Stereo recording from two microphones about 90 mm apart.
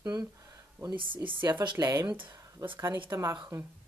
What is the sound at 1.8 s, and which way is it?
Speech, 35° right (ahead or behind).